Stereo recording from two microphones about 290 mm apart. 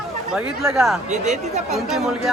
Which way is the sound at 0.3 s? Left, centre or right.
Centre.